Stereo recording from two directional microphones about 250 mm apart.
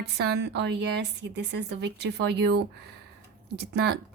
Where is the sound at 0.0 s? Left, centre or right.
Right.